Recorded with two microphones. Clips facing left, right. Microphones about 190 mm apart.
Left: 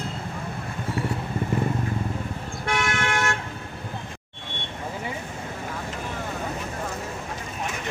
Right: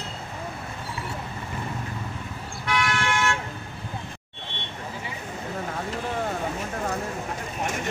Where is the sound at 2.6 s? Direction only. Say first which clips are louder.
Even; 50° left (ahead or behind).